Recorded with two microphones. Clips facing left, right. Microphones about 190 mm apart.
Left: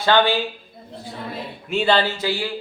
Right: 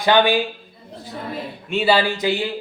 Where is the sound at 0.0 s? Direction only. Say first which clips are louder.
Right 2 dB; 15° right (ahead or behind).